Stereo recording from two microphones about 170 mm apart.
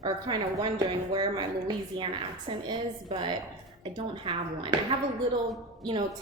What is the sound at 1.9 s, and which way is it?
A woman's voice, 30° right (ahead or behind).